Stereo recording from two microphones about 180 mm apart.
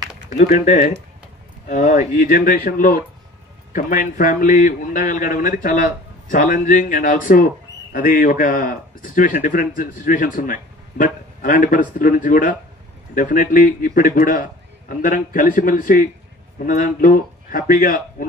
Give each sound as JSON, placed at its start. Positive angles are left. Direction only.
{"t": 0.3, "sound": "a man's voice", "side_deg": 45}